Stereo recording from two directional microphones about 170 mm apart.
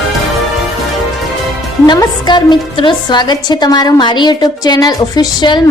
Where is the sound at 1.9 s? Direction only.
25° left (ahead or behind).